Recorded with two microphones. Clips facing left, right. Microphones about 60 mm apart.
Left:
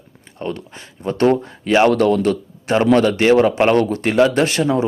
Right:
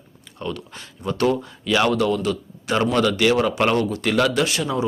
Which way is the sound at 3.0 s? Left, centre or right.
Left.